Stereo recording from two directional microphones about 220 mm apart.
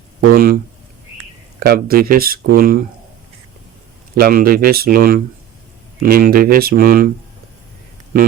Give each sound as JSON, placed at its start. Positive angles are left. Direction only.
{"t": 0.3, "sound": "speech", "side_deg": -40}
{"t": 4.1, "sound": "speech", "side_deg": -40}